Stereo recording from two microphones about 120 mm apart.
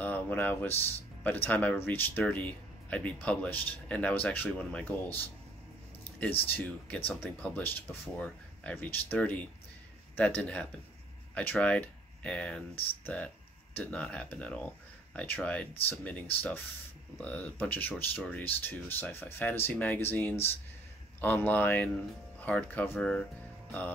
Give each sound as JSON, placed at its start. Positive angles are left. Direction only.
{"t": 0.0, "sound": "speech", "side_deg": 15}
{"t": 6.4, "sound": "speech", "side_deg": 15}